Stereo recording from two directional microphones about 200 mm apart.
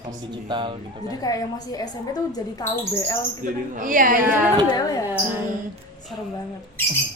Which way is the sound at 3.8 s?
45° right (ahead or behind).